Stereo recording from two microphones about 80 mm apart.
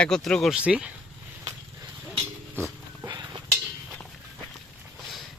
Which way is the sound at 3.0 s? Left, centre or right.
Right.